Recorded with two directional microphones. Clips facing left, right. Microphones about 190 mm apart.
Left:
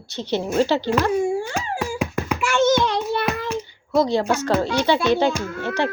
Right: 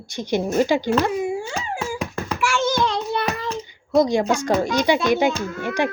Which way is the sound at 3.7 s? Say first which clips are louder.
Right 2 dB; 15° right (ahead or behind).